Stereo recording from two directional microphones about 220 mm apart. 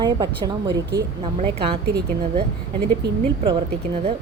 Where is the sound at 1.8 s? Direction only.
45° right (ahead or behind).